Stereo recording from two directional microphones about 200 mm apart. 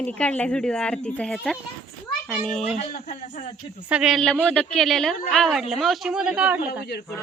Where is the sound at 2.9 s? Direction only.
40° left (ahead or behind).